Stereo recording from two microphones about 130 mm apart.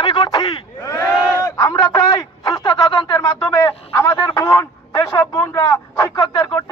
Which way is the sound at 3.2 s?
20° left (ahead or behind).